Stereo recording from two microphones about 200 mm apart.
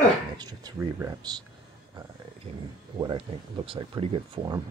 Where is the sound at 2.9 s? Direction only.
25° right (ahead or behind).